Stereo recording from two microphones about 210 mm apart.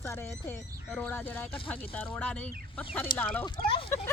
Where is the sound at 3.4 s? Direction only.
25° left (ahead or behind).